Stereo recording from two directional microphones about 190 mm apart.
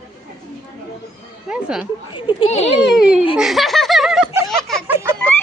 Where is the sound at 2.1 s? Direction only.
25° left (ahead or behind).